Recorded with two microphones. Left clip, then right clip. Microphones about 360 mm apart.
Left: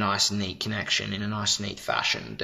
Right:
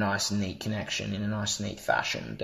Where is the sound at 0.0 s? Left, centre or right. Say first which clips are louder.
Left 4 dB; left.